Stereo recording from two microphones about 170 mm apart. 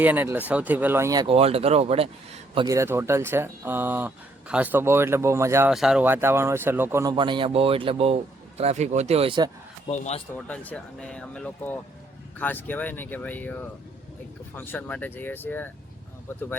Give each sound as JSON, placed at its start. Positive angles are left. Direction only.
{"t": 0.0, "sound": "speech", "side_deg": -10}
{"t": 1.3, "sound": "speech", "side_deg": -35}
{"t": 2.6, "sound": "speech", "side_deg": -15}
{"t": 5.7, "sound": "speech", "side_deg": -5}
{"t": 9.9, "sound": "speech", "side_deg": 40}
{"t": 10.3, "sound": "speech", "side_deg": 10}
{"t": 14.5, "sound": "speech", "side_deg": 10}